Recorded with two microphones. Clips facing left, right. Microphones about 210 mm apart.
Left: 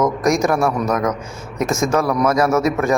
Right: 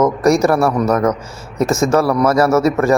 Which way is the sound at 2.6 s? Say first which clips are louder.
Right 4 dB; 35° right (ahead or behind).